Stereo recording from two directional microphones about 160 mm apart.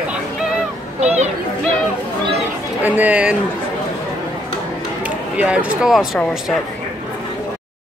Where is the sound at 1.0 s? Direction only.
45° right (ahead or behind).